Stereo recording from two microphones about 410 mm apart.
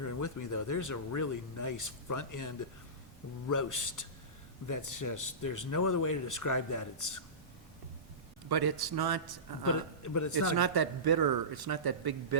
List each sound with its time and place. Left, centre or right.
0.0 s speech: left
8.4 s speech: right
10.0 s speech: left
10.5 s speech: right